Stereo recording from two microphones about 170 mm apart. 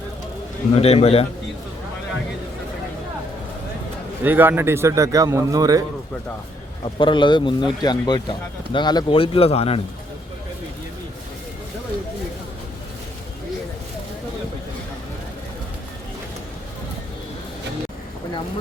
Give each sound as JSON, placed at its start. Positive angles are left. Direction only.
{"t": 0.8, "sound": "a man's voice", "side_deg": 35}
{"t": 4.2, "sound": "a man's voice", "side_deg": -10}
{"t": 6.8, "sound": "speech", "side_deg": 30}